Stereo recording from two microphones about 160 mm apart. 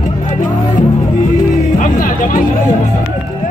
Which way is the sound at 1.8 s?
60° left (ahead or behind).